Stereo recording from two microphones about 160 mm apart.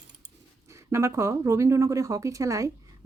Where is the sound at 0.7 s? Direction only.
15° right (ahead or behind).